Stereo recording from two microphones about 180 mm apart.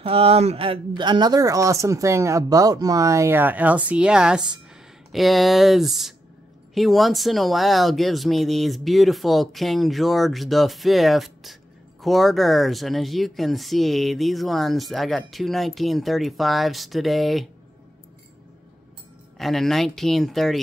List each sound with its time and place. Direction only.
0.0 s speech: 35° right (ahead or behind); by 17.5 s centre (ahead or behind)
19.3 s speech: centre (ahead or behind)